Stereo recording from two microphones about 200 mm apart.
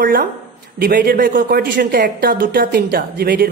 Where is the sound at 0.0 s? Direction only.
45° right (ahead or behind).